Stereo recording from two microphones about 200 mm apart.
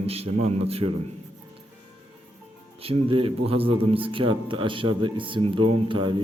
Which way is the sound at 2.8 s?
30° right (ahead or behind).